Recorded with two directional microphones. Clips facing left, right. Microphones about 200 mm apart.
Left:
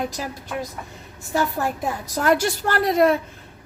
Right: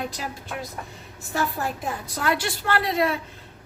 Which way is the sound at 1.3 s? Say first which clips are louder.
Left 4 dB; 40° left (ahead or behind).